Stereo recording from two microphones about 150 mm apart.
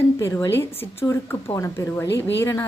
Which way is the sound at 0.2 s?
15° left (ahead or behind).